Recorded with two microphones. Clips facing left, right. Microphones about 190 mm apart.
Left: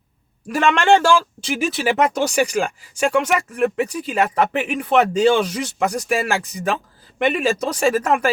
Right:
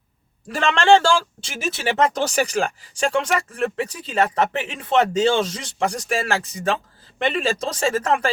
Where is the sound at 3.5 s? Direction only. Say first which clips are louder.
Left 4 dB; 30° right (ahead or behind).